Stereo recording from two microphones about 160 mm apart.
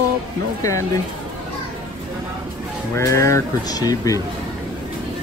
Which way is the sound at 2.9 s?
20° left (ahead or behind).